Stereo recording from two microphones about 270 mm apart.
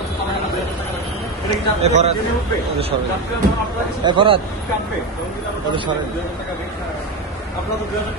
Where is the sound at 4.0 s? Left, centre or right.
Centre.